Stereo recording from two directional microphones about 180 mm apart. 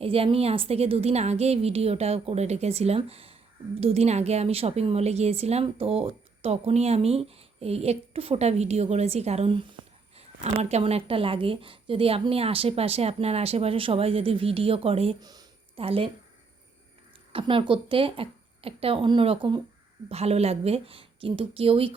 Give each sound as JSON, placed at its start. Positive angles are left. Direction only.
{"t": 0.0, "sound": "a woman's voice", "side_deg": -30}
{"t": 15.3, "sound": "a sound", "side_deg": -20}
{"t": 15.8, "sound": "a woman's voice", "side_deg": -30}
{"t": 17.3, "sound": "a woman's voice", "side_deg": -25}